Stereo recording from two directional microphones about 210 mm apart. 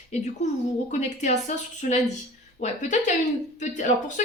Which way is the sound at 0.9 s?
35° left (ahead or behind).